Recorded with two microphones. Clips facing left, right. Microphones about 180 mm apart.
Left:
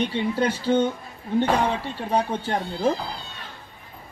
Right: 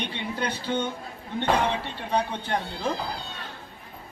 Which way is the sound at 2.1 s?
45° left (ahead or behind).